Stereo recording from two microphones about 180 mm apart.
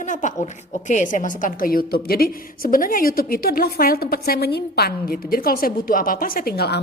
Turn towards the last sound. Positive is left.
turn(degrees=60)  # may be behind; listen again after turning